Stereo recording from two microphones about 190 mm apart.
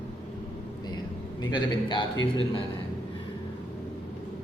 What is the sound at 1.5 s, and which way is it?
Speech, 25° left (ahead or behind).